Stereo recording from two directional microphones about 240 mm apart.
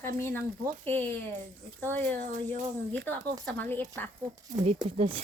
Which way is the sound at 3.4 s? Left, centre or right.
Centre.